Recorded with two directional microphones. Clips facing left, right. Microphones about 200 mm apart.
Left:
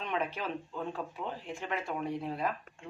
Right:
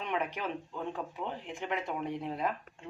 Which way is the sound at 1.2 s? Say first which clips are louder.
Right 1 dB; 20° right (ahead or behind).